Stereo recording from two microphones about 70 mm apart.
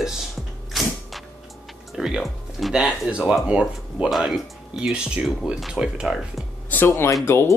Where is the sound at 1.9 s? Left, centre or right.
Centre.